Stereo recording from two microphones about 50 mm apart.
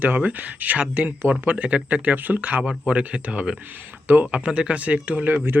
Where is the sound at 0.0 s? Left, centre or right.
Right.